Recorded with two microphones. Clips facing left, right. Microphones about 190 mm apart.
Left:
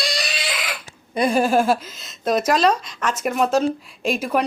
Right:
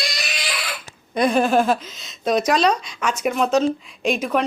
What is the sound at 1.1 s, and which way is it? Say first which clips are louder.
A woman's voice: even; 10° left (ahead or behind).